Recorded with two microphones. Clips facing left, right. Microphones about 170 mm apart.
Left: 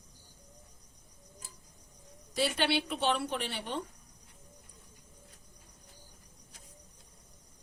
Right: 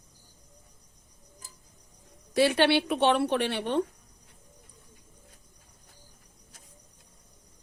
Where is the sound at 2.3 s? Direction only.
65° right (ahead or behind).